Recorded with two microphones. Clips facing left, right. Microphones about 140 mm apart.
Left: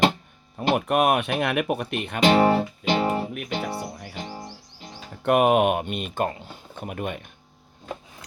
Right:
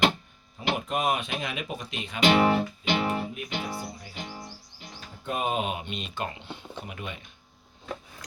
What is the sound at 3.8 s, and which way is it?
Speech, 65° left (ahead or behind).